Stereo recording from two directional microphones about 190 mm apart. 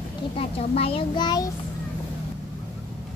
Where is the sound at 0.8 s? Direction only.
30° left (ahead or behind).